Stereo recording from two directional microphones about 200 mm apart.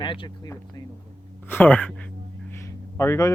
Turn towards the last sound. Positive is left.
turn(degrees=15)  # may be behind; listen again after turning